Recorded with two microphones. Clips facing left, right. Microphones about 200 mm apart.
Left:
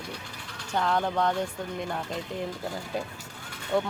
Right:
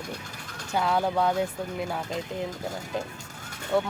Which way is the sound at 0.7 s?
10° right (ahead or behind).